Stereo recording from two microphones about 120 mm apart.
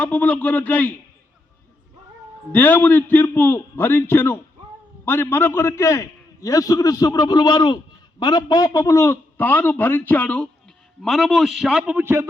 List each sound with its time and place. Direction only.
0.0 s a man's voice: 15° left (ahead or behind)
2.5 s a man's voice: 15° left (ahead or behind); by 12.0 s 5° right (ahead or behind)
12.0 s a man's voice: 20° right (ahead or behind)